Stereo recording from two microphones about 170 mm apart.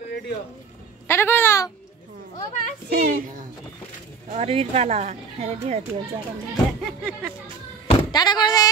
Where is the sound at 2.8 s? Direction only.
60° right (ahead or behind).